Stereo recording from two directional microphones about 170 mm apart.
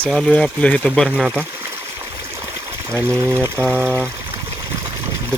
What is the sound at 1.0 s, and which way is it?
Stream, 10° right (ahead or behind).